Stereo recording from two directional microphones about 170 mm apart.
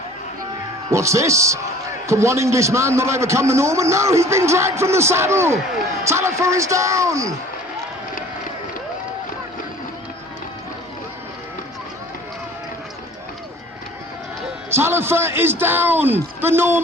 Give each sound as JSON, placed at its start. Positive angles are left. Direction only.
{"t": 0.9, "sound": "a man's voice", "side_deg": -15}
{"t": 14.7, "sound": "a man's voice", "side_deg": -15}